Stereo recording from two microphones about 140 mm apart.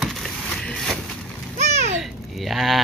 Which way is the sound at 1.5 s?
55° right (ahead or behind).